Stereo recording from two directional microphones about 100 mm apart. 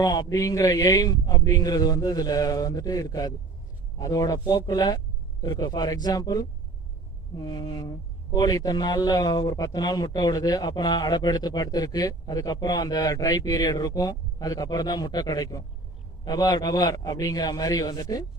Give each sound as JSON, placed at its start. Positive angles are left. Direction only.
{"t": 0.0, "sound": "a woman's voice", "side_deg": 40}